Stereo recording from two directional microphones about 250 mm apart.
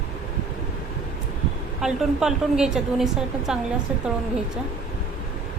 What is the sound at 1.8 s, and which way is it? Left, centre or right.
A woman's voice, centre.